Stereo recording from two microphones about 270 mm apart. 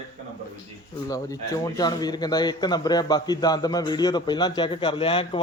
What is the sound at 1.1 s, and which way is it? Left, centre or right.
A man's voice, centre.